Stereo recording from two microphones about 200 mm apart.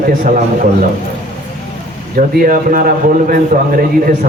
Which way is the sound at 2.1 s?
45° right (ahead or behind).